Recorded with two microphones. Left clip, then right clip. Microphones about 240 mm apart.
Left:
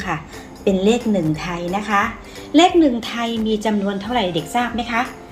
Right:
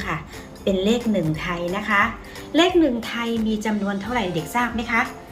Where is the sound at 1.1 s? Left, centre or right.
Left.